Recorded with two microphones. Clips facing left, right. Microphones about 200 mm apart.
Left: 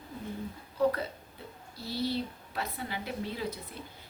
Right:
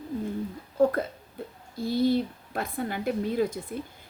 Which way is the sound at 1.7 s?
50° right (ahead or behind).